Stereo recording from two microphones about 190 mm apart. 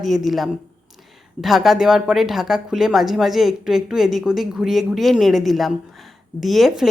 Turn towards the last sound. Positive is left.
turn(degrees=0)  # may be behind; listen again after turning